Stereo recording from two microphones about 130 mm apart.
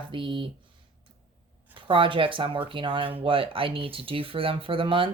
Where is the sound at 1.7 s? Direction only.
40° right (ahead or behind).